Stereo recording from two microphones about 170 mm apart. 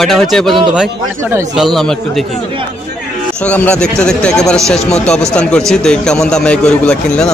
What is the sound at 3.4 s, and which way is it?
A man's voice, 10° left (ahead or behind).